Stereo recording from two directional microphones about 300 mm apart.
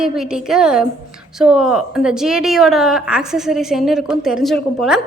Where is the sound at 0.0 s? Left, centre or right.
Centre.